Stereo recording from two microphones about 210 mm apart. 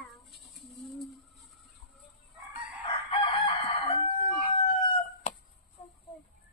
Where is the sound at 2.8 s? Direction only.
20° left (ahead or behind).